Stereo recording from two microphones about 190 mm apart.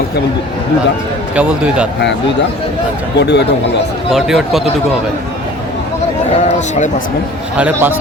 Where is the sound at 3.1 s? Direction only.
65° left (ahead or behind).